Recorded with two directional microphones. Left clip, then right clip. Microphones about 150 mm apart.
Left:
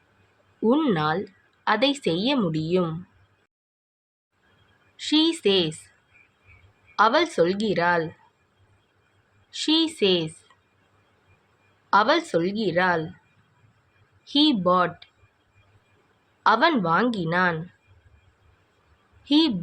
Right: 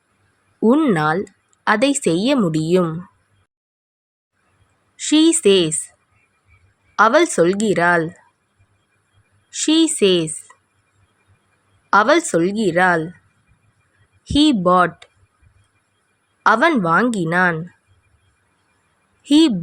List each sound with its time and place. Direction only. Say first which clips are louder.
0.6 s speech: right 6 dB; 45° right (ahead or behind)
0.9 s speech: right 6 dB; 55° right (ahead or behind)
4.9 s a woman's voice: right 7 dB; 55° right (ahead or behind)
6.9 s a woman's voice: right 6 dB; 55° right (ahead or behind)
9.5 s speech: right 6 dB; 50° right (ahead or behind)
11.9 s speech: right 6 dB; 55° right (ahead or behind)
14.3 s speech: right 6 dB; 55° right (ahead or behind)
16.4 s speech: right 5 dB; 50° right (ahead or behind)
19.2 s speech: right 7 dB; 55° right (ahead or behind)